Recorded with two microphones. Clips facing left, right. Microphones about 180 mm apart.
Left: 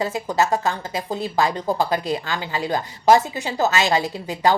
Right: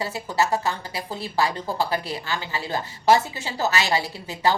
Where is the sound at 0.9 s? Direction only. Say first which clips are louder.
Left 5 dB; 20° left (ahead or behind).